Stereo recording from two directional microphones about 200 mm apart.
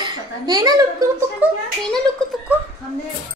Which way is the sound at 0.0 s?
20° right (ahead or behind).